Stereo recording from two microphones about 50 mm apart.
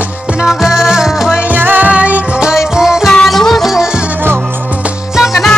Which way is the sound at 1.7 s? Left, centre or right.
Right.